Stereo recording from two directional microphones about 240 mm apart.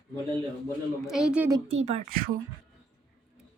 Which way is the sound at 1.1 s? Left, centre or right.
Centre.